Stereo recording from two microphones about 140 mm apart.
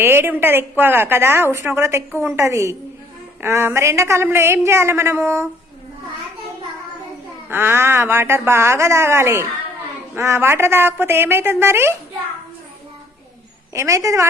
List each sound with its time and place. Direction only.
0.0 s a woman's voice: 15° right (ahead or behind)
7.5 s a woman's voice: 15° right (ahead or behind)
13.7 s a woman's voice: 20° right (ahead or behind)